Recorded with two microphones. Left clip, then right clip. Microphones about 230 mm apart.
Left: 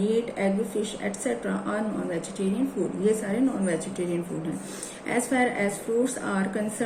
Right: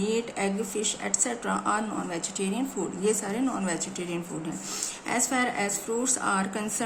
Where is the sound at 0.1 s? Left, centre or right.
Right.